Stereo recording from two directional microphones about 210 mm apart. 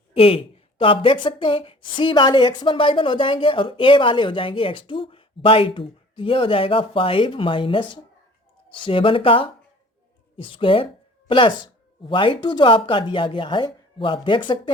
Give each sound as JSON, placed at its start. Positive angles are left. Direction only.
{"t": 0.1, "sound": "speech", "side_deg": 25}